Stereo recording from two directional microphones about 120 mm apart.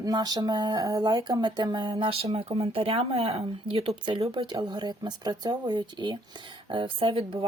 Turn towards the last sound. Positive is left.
turn(degrees=-45)  # may be behind; listen again after turning